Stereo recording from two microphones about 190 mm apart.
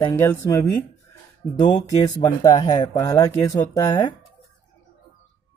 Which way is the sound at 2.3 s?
20° left (ahead or behind).